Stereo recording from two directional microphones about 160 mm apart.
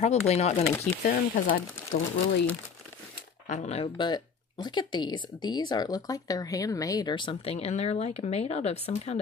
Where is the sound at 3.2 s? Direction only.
50° left (ahead or behind).